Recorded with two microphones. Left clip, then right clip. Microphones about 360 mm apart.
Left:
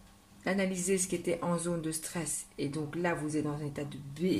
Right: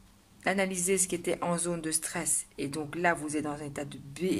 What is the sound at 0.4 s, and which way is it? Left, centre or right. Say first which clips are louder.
Speech: right 3 dB; right.